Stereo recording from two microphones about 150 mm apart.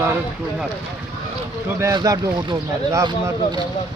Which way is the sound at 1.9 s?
25° right (ahead or behind).